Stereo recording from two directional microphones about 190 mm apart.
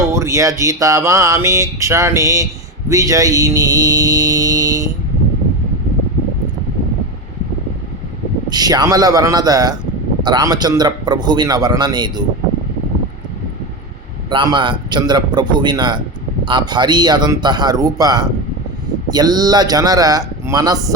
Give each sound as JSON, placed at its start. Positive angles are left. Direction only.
{"t": 0.1, "sound": "a man's voice", "side_deg": -15}
{"t": 8.4, "sound": "a man's voice", "side_deg": -20}
{"t": 14.3, "sound": "a man's voice", "side_deg": -25}